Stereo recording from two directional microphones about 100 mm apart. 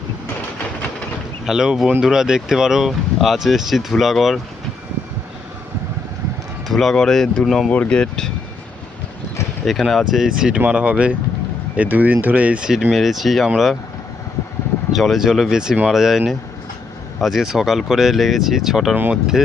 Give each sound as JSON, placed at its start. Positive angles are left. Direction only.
{"t": 1.5, "sound": "speech", "side_deg": -5}
{"t": 6.7, "sound": "speech", "side_deg": 5}
{"t": 9.6, "sound": "speech", "side_deg": 0}
{"t": 14.9, "sound": "speech", "side_deg": 0}
{"t": 18.9, "sound": "speech", "side_deg": -20}